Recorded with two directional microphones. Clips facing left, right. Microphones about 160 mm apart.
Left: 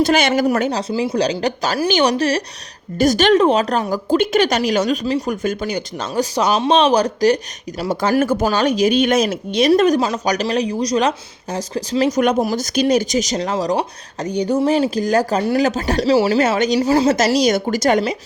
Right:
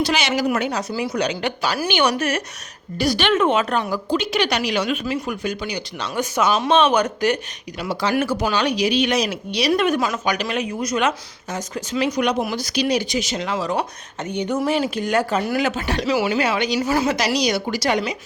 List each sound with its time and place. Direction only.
0.0 s speech: 50° left (ahead or behind)
0.4 s speech: 40° left (ahead or behind)
3.0 s speech: 45° left (ahead or behind)
17.4 s speech: 45° left (ahead or behind)